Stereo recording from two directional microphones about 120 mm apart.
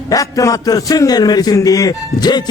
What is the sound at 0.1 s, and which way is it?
A man's voice, 30° left (ahead or behind).